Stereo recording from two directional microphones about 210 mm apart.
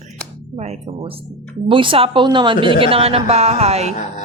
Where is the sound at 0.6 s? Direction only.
30° right (ahead or behind).